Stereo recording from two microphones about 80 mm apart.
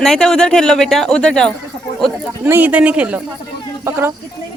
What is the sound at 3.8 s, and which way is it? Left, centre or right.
Speech, right.